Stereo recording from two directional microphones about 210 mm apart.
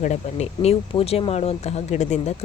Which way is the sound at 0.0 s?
30° left (ahead or behind).